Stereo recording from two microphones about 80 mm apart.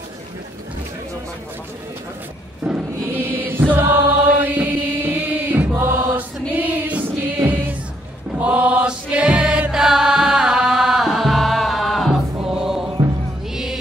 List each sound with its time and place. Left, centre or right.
2.6 s chant: centre
3.1 s chant: right
6.1 s music: right; by 12.2 s centre
12.4 s choir: centre